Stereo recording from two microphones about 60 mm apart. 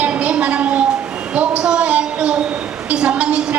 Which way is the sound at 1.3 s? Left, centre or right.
Centre.